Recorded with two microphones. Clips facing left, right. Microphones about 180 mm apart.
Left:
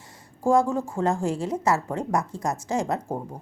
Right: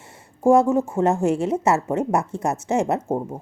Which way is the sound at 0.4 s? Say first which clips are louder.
Right 5 dB; 25° right (ahead or behind).